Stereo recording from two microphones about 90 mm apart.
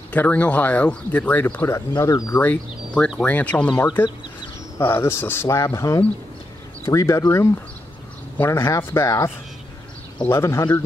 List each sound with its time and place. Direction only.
0.1 s speech: 15° left (ahead or behind)
1.7 s speech: 40° left (ahead or behind)
2.4 s speech: 15° left (ahead or behind); by 7.2 s 35° left (ahead or behind)
8.4 s speech: 25° left (ahead or behind)